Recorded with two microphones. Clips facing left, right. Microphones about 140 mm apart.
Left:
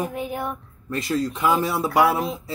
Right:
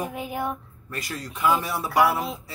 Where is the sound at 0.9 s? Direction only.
25° left (ahead or behind).